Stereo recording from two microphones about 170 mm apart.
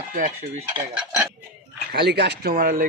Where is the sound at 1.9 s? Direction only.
75° right (ahead or behind).